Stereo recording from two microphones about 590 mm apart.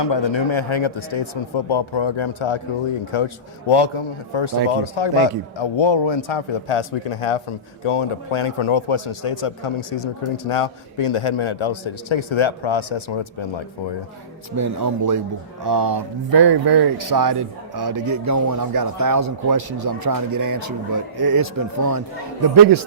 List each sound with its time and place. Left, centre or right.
0.0 s speech: left
14.5 s a man's voice: right